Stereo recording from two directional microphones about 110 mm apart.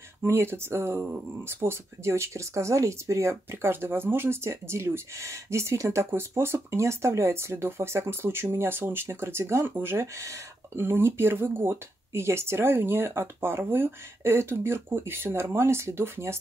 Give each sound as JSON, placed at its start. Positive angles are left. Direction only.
{"t": 0.2, "sound": "speech", "side_deg": -25}